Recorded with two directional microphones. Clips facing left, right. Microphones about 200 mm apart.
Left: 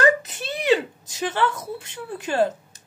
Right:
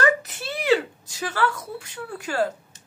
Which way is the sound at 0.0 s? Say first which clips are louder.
Left 2 dB; 20° left (ahead or behind).